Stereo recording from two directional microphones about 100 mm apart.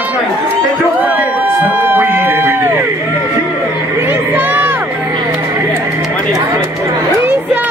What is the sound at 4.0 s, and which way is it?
Crowd, 20° right (ahead or behind).